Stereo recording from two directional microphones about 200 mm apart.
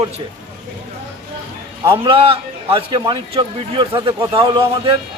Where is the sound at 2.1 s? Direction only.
25° right (ahead or behind).